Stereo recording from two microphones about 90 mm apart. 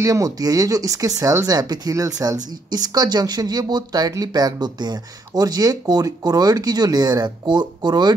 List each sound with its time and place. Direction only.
0.0 s speech: 40° right (ahead or behind)